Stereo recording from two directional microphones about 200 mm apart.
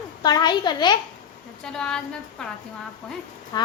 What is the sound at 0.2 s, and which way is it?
Speech, 20° left (ahead or behind).